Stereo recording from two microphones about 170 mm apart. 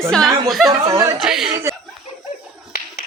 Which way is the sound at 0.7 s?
20° right (ahead or behind).